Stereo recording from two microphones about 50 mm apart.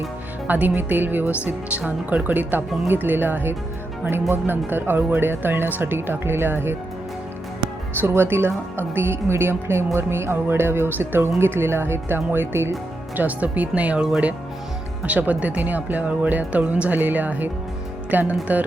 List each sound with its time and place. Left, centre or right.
0.4 s speech: right
8.0 s speech: right
13.1 s speech: right
15.0 s speech: right